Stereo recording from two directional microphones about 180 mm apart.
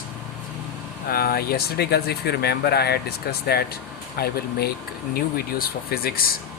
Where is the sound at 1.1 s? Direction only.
60° left (ahead or behind).